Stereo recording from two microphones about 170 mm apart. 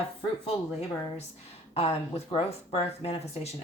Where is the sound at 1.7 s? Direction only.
35° left (ahead or behind).